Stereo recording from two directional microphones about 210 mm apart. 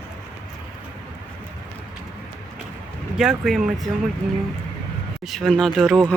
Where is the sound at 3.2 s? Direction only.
Centre (ahead or behind).